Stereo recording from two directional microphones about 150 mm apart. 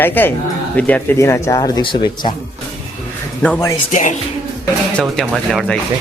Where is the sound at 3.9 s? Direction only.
55° left (ahead or behind).